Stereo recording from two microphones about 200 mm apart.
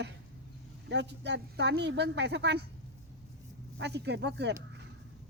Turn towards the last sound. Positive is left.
turn(degrees=-60)  # may be behind; listen again after turning